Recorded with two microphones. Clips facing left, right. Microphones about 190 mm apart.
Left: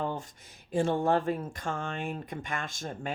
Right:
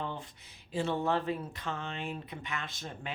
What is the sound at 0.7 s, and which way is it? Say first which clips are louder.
Speech: left 5 dB; 50° left (ahead or behind).